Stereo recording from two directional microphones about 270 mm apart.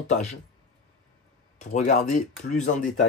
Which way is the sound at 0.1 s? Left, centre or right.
Left.